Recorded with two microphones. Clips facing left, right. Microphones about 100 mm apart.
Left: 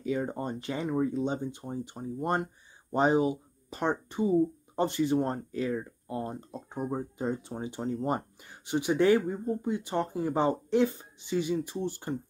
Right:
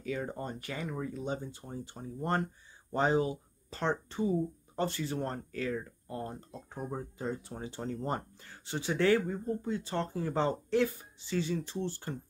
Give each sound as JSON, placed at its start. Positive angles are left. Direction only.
{"t": 0.0, "sound": "speech", "side_deg": 20}